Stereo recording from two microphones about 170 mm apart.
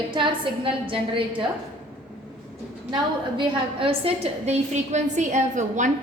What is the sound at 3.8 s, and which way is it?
A woman's voice, 35° right (ahead or behind).